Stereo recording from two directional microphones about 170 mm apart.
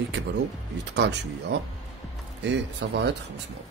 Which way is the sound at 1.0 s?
90° right.